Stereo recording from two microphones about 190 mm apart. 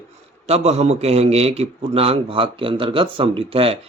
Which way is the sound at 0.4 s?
35° right (ahead or behind).